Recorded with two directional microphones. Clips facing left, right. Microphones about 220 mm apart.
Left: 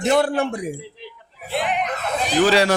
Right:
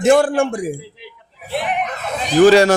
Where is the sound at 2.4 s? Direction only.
45° right (ahead or behind).